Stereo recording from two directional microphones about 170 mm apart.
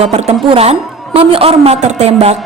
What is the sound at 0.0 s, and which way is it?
Speech, 40° right (ahead or behind).